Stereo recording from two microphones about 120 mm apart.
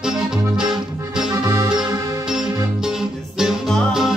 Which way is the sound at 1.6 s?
35° right (ahead or behind).